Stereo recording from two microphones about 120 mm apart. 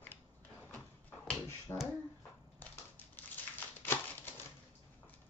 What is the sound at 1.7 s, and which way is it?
Speech, 20° left (ahead or behind).